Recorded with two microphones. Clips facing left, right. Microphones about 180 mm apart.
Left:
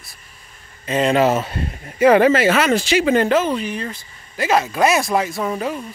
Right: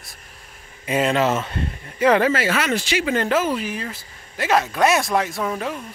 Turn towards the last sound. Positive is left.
turn(degrees=5)  # may be behind; listen again after turning